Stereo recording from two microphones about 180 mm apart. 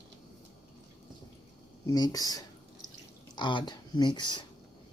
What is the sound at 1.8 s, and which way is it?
Speech, 20° left (ahead or behind).